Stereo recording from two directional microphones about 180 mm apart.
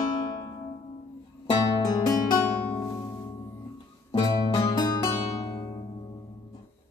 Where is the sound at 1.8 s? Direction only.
20° left (ahead or behind).